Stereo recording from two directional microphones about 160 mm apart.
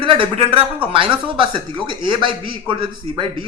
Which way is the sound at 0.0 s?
35° right (ahead or behind).